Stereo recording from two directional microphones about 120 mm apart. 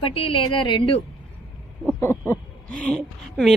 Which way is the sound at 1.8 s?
20° left (ahead or behind).